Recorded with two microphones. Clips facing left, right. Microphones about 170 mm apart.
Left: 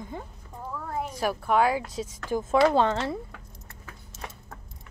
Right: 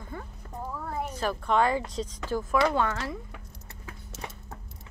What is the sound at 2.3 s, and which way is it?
Speech, 25° left (ahead or behind).